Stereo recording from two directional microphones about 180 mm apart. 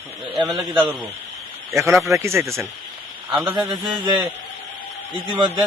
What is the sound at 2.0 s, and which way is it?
Speech, 15° right (ahead or behind).